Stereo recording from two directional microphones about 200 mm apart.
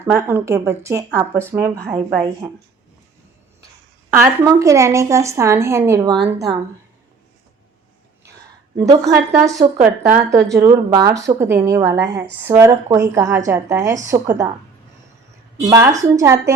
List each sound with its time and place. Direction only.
0.0 s speech: 10° right (ahead or behind)
4.1 s speech: 15° right (ahead or behind)
8.8 s speech: 15° right (ahead or behind)
15.7 s speech: 15° right (ahead or behind)